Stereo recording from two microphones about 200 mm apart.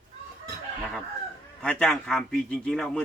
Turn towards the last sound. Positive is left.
turn(degrees=5)  # may be behind; listen again after turning